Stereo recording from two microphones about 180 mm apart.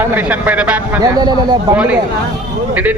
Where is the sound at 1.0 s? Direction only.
20° right (ahead or behind).